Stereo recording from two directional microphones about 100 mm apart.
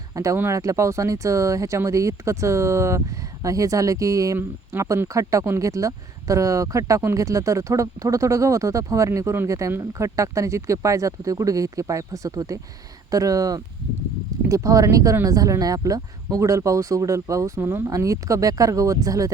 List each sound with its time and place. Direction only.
0.1 s speech: 30° right (ahead or behind)